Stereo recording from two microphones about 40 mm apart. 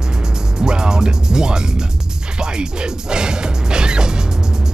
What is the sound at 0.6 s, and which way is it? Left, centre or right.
Music, centre.